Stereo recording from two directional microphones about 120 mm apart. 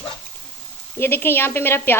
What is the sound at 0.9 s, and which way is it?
A woman's voice, 20° left (ahead or behind).